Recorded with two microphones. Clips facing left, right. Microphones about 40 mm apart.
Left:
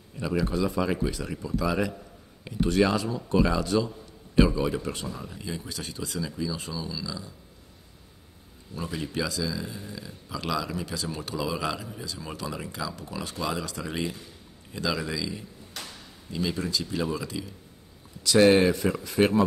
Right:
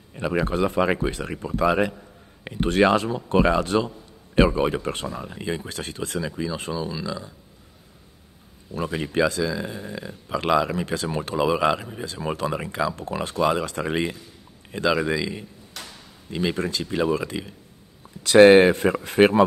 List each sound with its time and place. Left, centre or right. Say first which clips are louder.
0.1 s speech: right 4 dB; right
8.7 s speech: right 7 dB; right